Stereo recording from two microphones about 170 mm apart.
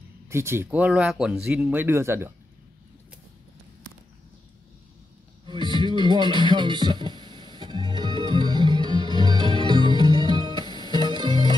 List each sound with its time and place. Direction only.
0.3 s speech: 15° right (ahead or behind)
5.5 s a sound: 25° right (ahead or behind)
5.9 s music: 25° left (ahead or behind)
6.5 s music: 25° right (ahead or behind)
9.0 s music: 25° left (ahead or behind)
9.7 s music: 25° right (ahead or behind)
10.7 s music: 25° left (ahead or behind)